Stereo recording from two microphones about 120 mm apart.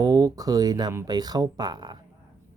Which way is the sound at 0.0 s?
30° right (ahead or behind).